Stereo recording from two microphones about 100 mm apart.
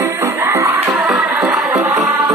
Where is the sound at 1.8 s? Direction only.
35° right (ahead or behind).